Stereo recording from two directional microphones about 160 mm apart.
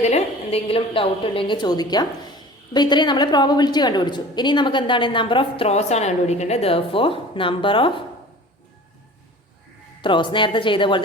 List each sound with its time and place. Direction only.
0.0 s a woman's voice: 40° left (ahead or behind)
10.0 s a woman's voice: 30° left (ahead or behind)